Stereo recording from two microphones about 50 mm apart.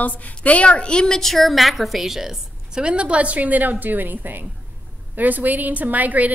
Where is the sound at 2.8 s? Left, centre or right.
Right.